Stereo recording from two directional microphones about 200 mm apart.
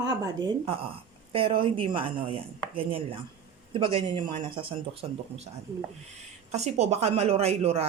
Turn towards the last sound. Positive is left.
turn(degrees=-30)  # may be behind; listen again after turning